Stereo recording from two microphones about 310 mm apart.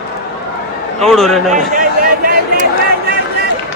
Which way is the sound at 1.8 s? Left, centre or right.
Right.